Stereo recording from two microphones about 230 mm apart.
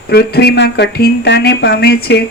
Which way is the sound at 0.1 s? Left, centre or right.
Left.